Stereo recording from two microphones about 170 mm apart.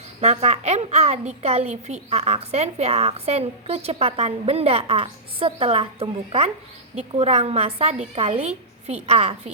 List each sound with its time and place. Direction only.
0.2 s a woman's voice: 40° right (ahead or behind)